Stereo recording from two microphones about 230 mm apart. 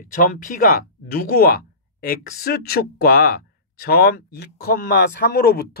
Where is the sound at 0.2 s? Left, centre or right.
Left.